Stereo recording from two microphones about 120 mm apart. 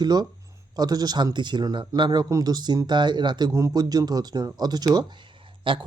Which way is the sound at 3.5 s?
30° right (ahead or behind).